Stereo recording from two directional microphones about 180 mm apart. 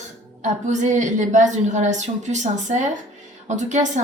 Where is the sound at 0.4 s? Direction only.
40° right (ahead or behind).